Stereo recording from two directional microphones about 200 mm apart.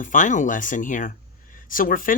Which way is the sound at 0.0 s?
40° left (ahead or behind).